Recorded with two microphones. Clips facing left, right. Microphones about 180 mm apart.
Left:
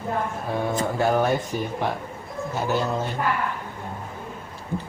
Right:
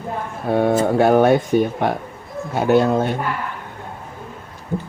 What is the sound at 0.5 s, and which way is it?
Speech, 65° right (ahead or behind).